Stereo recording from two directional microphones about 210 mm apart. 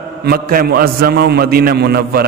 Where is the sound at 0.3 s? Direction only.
45° right (ahead or behind).